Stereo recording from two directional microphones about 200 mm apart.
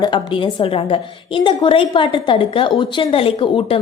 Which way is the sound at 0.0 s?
20° left (ahead or behind).